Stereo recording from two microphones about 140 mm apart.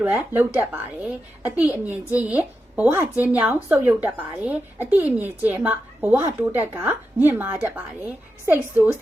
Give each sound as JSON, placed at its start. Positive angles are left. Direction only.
{"t": 0.0, "sound": "a woman's voice", "side_deg": -15}